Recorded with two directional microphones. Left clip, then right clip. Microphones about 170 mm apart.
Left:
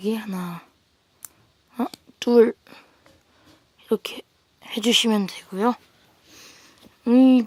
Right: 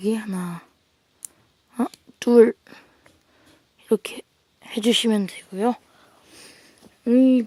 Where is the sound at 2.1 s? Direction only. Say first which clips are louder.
Right 2 dB; 20° right (ahead or behind).